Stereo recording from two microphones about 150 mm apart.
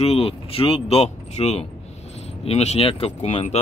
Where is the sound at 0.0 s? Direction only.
40° left (ahead or behind).